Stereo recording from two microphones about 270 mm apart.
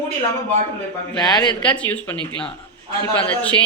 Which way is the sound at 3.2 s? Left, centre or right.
Centre.